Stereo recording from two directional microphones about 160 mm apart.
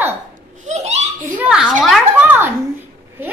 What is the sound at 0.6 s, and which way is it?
Speech, 45° right (ahead or behind).